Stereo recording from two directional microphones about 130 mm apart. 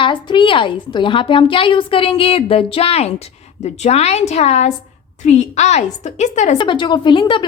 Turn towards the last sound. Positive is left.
turn(degrees=40)  # may be behind; listen again after turning